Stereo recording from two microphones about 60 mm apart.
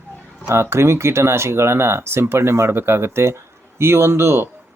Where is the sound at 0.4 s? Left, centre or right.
Right.